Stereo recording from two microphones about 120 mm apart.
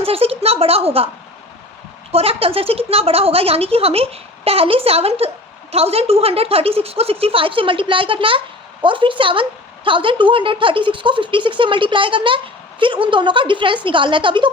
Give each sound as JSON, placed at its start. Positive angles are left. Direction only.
{"t": 0.0, "sound": "a woman's voice", "side_deg": -55}
{"t": 2.1, "sound": "a woman's voice", "side_deg": -50}